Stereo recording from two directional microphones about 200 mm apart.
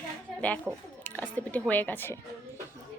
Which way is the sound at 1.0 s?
10° left (ahead or behind).